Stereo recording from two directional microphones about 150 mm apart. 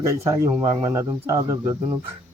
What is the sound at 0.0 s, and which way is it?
Speech, 20° right (ahead or behind).